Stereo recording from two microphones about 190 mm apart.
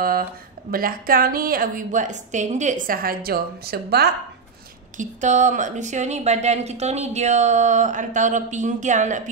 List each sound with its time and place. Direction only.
0.7 s a woman's voice: 50° right (ahead or behind)
4.9 s speech: 40° right (ahead or behind)